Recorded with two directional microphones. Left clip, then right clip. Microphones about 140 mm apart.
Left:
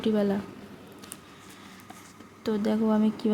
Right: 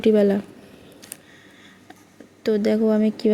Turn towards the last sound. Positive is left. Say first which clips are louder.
# right 7 dB
turn(degrees=-15)  # may be behind; listen again after turning